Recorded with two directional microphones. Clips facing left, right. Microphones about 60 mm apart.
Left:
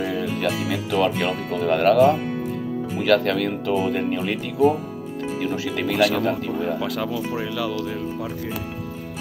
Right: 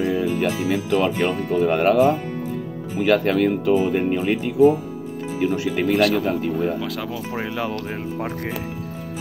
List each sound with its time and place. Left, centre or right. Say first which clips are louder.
0.1 s speech: right 3 dB; right
5.4 s speech: right 5 dB; centre
5.9 s speech: left 2 dB; centre
7.3 s speech: even; right